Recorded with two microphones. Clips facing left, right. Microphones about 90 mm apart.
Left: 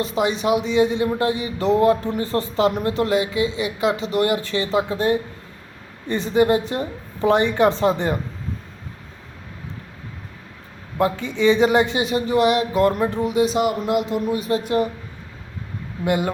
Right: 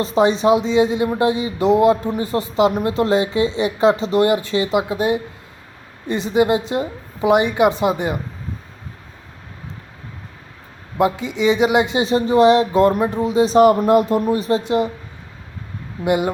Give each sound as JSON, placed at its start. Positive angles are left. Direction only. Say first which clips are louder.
{"t": 0.0, "sound": "a woman's voice", "louder": "right 5 dB", "side_deg": -30}
{"t": 10.9, "sound": "speech", "louder": "right 3 dB", "side_deg": -15}
{"t": 13.6, "sound": "speech", "louder": "right 8 dB", "side_deg": -45}
{"t": 14.6, "sound": "speech", "louder": "right 2 dB", "side_deg": -20}
{"t": 16.0, "sound": "speech", "louder": "right 3 dB", "side_deg": -20}